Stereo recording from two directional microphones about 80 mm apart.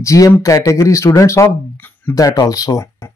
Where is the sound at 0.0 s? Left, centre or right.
Left.